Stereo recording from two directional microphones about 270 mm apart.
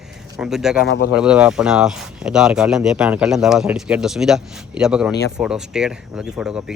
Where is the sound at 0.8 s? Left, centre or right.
Left.